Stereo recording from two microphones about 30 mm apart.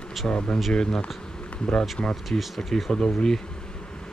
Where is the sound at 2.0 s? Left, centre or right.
Left.